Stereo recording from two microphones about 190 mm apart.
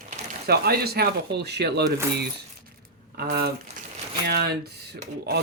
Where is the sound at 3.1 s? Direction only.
55° right (ahead or behind).